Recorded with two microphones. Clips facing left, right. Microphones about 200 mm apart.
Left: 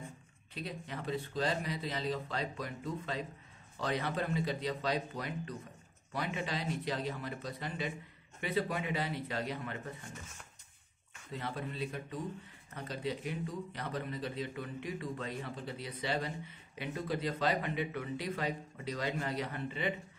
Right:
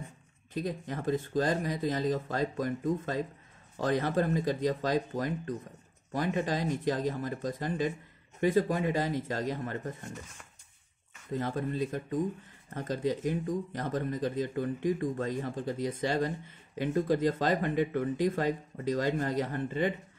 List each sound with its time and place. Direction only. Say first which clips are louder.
0.6 s speech: right 8 dB; 45° right (ahead or behind)
11.3 s speech: right 8 dB; 45° right (ahead or behind)